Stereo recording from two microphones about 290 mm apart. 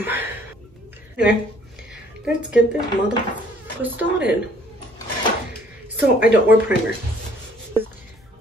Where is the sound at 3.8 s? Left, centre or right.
Centre.